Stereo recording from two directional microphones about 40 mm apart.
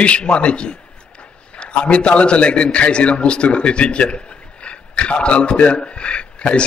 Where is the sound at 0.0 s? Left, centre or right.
Left.